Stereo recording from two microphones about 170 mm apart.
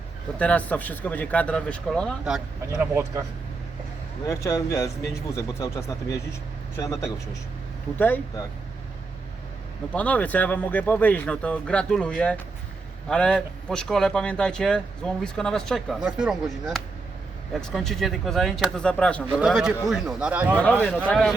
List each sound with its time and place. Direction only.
0.3 s speech: 10° left (ahead or behind)
4.3 s speech: 20° left (ahead or behind)
9.9 s speech: 10° left (ahead or behind); by 20.6 s 10° right (ahead or behind)
20.6 s speech: 10° left (ahead or behind)